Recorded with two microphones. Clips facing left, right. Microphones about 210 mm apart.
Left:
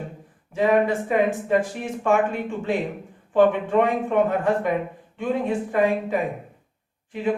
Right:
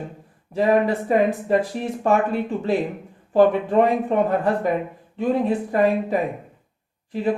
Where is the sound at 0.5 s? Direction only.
40° right (ahead or behind).